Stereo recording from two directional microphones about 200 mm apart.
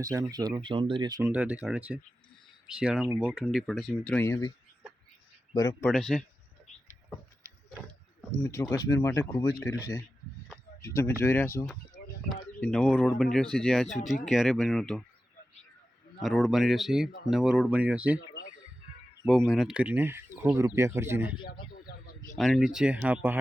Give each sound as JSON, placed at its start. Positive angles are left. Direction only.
{"t": 0.0, "sound": "speech", "side_deg": -15}
{"t": 1.3, "sound": "speech", "side_deg": -5}
{"t": 3.4, "sound": "speech", "side_deg": 0}
{"t": 5.8, "sound": "speech", "side_deg": 5}
{"t": 8.4, "sound": "speech", "side_deg": 15}
{"t": 10.8, "sound": "speech", "side_deg": 15}
{"t": 12.0, "sound": "a sound", "side_deg": 45}
{"t": 12.3, "sound": "speech", "side_deg": 5}
{"t": 16.2, "sound": "speech", "side_deg": 0}
{"t": 19.2, "sound": "speech", "side_deg": -5}
{"t": 22.4, "sound": "speech", "side_deg": 0}